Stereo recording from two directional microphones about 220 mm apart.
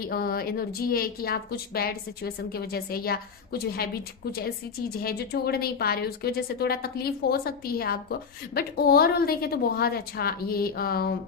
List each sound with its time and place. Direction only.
0.0 s a woman's voice: 45° left (ahead or behind)
5.0 s a woman's voice: 45° left (ahead or behind)